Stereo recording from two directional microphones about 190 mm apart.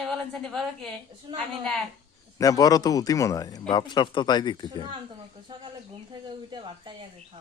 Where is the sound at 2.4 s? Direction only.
20° left (ahead or behind).